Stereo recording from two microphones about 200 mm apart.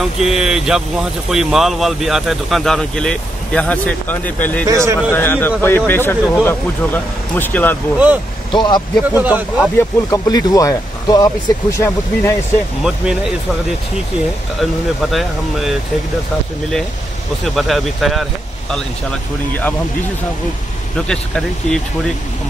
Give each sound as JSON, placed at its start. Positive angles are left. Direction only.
{"t": 0.0, "sound": "speech", "side_deg": 0}
{"t": 4.6, "sound": "speech", "side_deg": -15}
{"t": 5.1, "sound": "speech", "side_deg": 10}
{"t": 8.5, "sound": "speech", "side_deg": 20}
{"t": 9.2, "sound": "speech", "side_deg": -5}
{"t": 9.8, "sound": "speech", "side_deg": 15}
{"t": 12.8, "sound": "speech", "side_deg": -5}
{"t": 14.6, "sound": "speech", "side_deg": 0}
{"t": 17.6, "sound": "speech", "side_deg": 0}
{"t": 21.1, "sound": "speech", "side_deg": 5}